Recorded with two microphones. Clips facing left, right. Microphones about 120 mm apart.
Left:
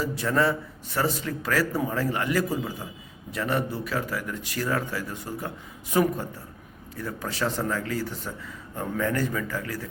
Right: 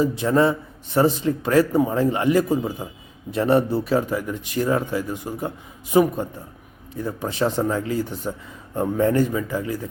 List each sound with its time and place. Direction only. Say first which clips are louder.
0.0 s a man's voice: right 6 dB; 20° right (ahead or behind)